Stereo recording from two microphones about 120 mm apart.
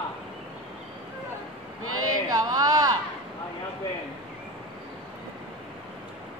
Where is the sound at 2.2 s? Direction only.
30° right (ahead or behind).